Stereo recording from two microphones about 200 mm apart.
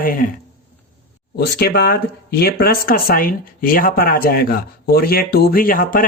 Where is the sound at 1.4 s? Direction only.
50° left (ahead or behind).